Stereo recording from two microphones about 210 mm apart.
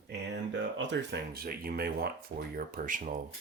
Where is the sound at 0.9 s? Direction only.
50° right (ahead or behind).